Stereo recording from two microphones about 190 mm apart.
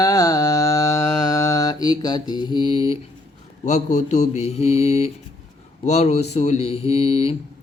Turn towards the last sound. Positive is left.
turn(degrees=30)  # may be behind; listen again after turning